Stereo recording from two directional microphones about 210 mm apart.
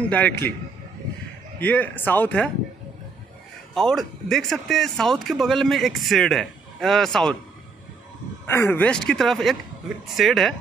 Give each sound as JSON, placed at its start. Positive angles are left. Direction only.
{"t": 0.1, "sound": "speech", "side_deg": 10}
{"t": 1.6, "sound": "speech", "side_deg": 5}
{"t": 3.7, "sound": "speech", "side_deg": 0}
{"t": 8.5, "sound": "speech", "side_deg": 10}